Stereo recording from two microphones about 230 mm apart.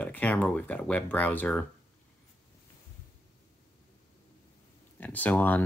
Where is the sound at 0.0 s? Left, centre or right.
Centre.